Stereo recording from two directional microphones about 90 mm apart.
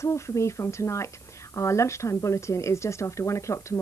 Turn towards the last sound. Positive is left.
turn(degrees=35)  # may be behind; listen again after turning